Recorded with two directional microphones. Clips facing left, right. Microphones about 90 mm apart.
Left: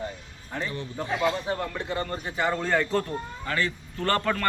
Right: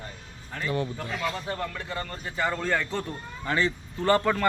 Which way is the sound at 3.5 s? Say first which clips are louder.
Right 3 dB; 25° right (ahead or behind).